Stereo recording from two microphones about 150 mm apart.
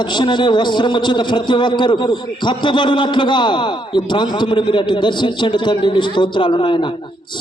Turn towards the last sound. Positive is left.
turn(degrees=35)  # may be behind; listen again after turning